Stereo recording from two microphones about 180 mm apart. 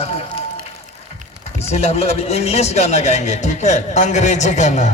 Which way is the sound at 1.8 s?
35° left (ahead or behind).